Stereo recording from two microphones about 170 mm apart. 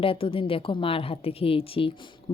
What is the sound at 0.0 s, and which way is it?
Speech, 30° left (ahead or behind).